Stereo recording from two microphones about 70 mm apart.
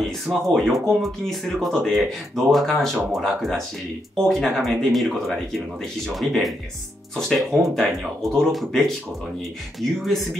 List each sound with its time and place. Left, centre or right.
0.3 s speech: centre